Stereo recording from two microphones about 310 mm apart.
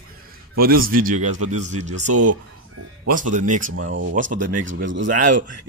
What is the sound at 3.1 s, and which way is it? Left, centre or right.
Speech, right.